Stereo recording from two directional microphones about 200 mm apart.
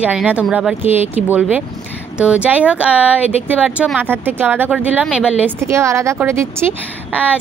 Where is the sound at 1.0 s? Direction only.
30° left (ahead or behind).